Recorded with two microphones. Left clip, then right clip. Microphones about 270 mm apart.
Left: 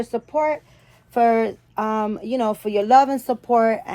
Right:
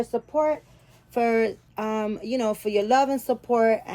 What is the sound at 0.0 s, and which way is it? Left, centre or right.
A woman's voice, left.